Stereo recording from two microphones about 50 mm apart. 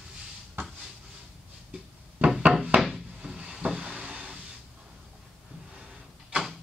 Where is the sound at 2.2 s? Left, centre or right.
Right.